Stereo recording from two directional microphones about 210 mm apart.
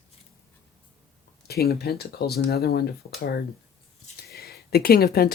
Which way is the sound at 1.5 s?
50° left (ahead or behind).